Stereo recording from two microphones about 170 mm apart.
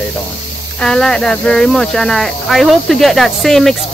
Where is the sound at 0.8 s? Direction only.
5° left (ahead or behind).